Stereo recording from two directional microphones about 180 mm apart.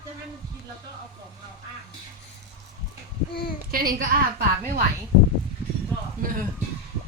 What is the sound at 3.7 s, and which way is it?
Speech, 55° right (ahead or behind).